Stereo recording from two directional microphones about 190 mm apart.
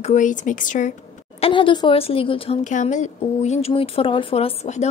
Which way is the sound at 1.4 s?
25° left (ahead or behind).